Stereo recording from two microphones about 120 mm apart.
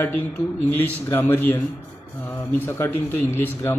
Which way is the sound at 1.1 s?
15° left (ahead or behind).